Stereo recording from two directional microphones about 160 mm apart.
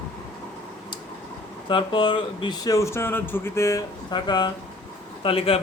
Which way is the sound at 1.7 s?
30° left (ahead or behind).